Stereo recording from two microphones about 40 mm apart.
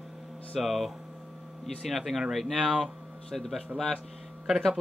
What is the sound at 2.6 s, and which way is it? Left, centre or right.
Speech, right.